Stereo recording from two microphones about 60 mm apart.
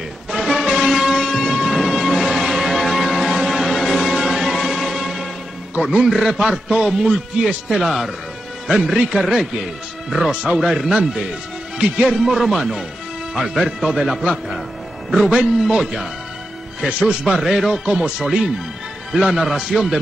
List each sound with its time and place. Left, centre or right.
0.3 s music: centre
0.7 s train: centre
5.8 s music: centre
6.0 s speech: centre
7.7 s speech: centre